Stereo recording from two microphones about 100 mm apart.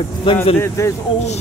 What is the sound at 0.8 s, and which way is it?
Speech, 30° left (ahead or behind).